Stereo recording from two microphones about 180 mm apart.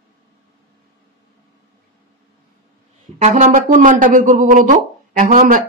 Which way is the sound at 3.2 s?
40° right (ahead or behind).